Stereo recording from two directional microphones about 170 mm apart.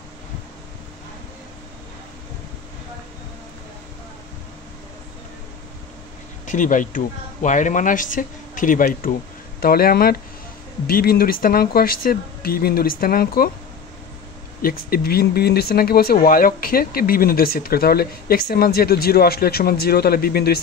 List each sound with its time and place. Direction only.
6.4 s speech: 50° left (ahead or behind)
14.6 s speech: 60° left (ahead or behind)